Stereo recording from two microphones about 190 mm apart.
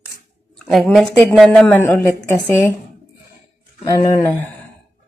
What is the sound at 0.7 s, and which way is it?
Speech, centre (ahead or behind).